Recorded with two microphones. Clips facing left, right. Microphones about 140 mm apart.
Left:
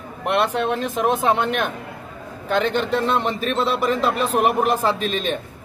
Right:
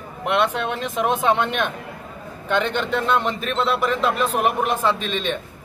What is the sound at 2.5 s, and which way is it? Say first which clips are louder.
A man's voice: left 2 dB; 40° left (ahead or behind).